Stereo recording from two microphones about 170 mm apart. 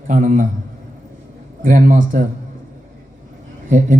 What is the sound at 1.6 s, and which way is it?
Speech, 50° right (ahead or behind).